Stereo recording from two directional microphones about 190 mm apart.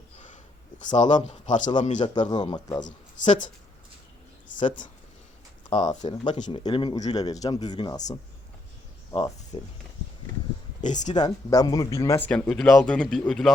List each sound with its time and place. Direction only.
0.9 s speech: 40° left (ahead or behind)
2.3 s speech: 20° left (ahead or behind)
2.8 s speech: 40° left (ahead or behind)
5.9 s speech: 20° left (ahead or behind)
6.3 s speech: 40° left (ahead or behind)
6.6 s speech: 25° left (ahead or behind)
10.8 s speech: 40° left (ahead or behind)
11.1 s speech: 20° left (ahead or behind)
12.3 s speech: centre (ahead or behind)